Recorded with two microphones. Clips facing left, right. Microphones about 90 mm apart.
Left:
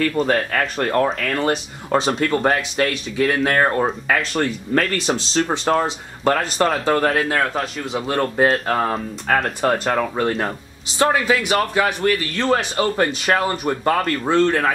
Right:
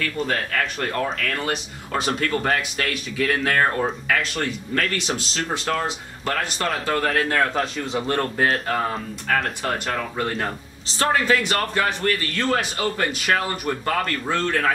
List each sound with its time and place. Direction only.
0.0 s speech: 35° left (ahead or behind); by 3.6 s 20° left (ahead or behind)
3.8 s speech: 35° left (ahead or behind)
7.2 s a man's voice: 5° left (ahead or behind)
8.5 s speech: 30° left (ahead or behind)
11.3 s a man's voice: 5° left (ahead or behind)
12.4 s speech: 25° left (ahead or behind)